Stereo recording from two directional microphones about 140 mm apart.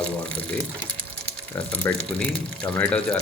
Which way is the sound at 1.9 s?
15° left (ahead or behind).